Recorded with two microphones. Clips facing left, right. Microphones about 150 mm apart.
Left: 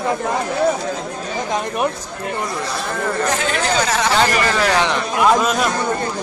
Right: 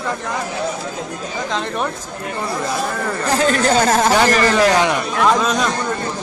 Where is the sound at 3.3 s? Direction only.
40° right (ahead or behind).